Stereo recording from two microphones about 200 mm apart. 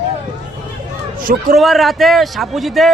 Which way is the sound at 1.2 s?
45° right (ahead or behind).